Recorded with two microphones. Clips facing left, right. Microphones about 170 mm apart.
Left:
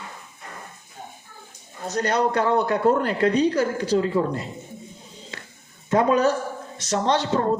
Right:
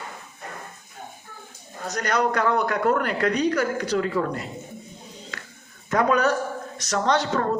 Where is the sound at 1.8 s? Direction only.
30° left (ahead or behind).